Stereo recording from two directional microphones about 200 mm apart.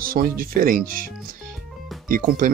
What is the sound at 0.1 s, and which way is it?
Speech, 45° right (ahead or behind).